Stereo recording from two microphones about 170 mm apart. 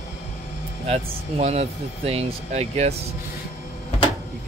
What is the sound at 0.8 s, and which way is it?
Speech, 40° right (ahead or behind).